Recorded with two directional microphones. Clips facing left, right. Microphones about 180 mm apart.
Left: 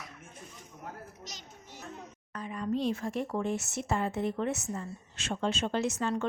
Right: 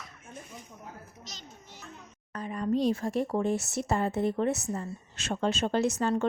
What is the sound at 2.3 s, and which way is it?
Speech, 40° right (ahead or behind).